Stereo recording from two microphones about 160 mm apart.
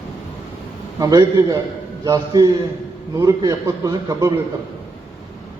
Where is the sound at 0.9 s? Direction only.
25° right (ahead or behind).